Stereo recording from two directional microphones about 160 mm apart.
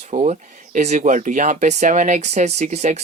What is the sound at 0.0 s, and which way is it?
Speech, 45° right (ahead or behind).